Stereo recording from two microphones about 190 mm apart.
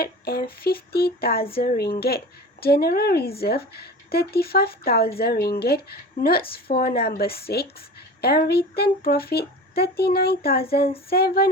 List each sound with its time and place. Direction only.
0.0 s child singing: 55° left (ahead or behind)
1.5 s a woman's voice: 50° left (ahead or behind)
11.1 s child singing: 55° left (ahead or behind)